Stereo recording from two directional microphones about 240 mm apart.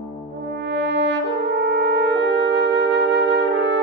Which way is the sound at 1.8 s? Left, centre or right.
Right.